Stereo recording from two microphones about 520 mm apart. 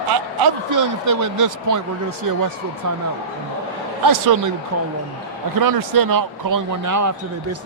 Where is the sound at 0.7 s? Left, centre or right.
Right.